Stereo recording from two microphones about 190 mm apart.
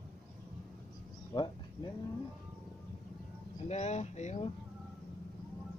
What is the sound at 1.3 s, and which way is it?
Speech, 25° left (ahead or behind).